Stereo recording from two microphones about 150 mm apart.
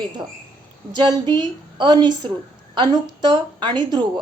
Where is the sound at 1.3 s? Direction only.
30° right (ahead or behind).